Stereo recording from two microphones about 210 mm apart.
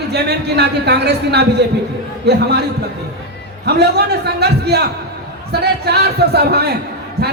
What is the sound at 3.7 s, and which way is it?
Speech, 50° right (ahead or behind).